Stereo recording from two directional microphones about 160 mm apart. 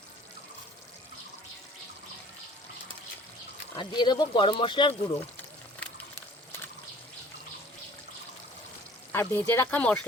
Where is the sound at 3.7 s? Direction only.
25° left (ahead or behind).